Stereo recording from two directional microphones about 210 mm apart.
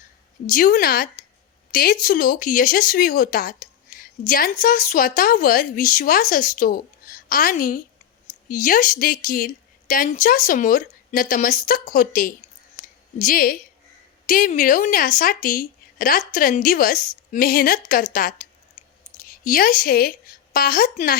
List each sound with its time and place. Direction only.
0.5 s a woman's voice: 45° left (ahead or behind)